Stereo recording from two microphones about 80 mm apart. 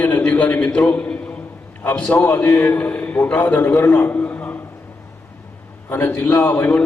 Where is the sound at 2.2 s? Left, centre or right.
Left.